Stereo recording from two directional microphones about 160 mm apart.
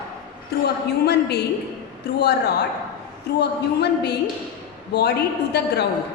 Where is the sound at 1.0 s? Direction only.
90° left.